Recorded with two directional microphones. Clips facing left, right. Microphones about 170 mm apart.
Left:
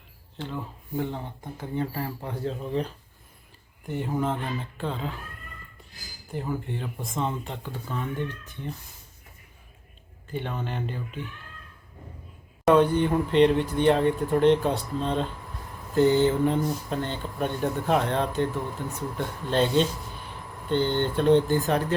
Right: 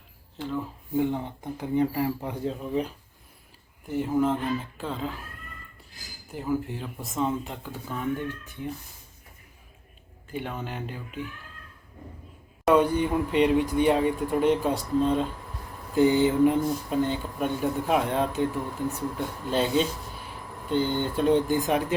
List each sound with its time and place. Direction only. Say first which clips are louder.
0.3 s speech: right 3 dB; centre (ahead or behind)
0.9 s speech: right 5 dB; 15° right (ahead or behind)
2.5 s speech: even; 5° right (ahead or behind)
6.3 s speech: right 2 dB; 5° right (ahead or behind)
10.3 s speech: left 1 dB; 5° right (ahead or behind)
12.6 s speech: left 1 dB; 10° right (ahead or behind)